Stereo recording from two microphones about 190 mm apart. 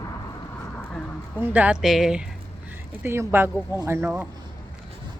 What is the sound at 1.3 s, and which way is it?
Speech, 5° right (ahead or behind).